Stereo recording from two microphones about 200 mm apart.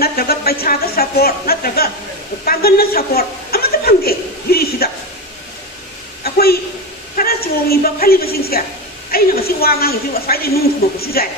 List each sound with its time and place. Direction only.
0.0 s speech: 50° left (ahead or behind)
6.2 s a sound: 50° left (ahead or behind)
7.2 s a woman's voice: 50° left (ahead or behind)